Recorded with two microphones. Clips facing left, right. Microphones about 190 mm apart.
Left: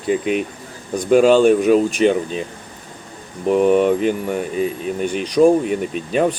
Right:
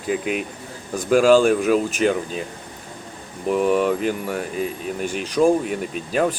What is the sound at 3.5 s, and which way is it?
Speech, 40° left (ahead or behind).